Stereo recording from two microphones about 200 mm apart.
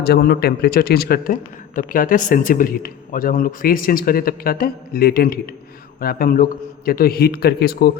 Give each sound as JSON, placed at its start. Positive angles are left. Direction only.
{"t": 0.0, "sound": "a man's voice", "side_deg": 50}